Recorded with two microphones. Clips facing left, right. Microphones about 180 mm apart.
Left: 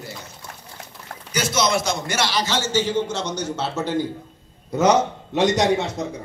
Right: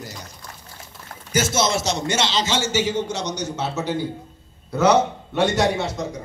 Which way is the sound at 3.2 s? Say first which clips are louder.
Even; 50° left (ahead or behind).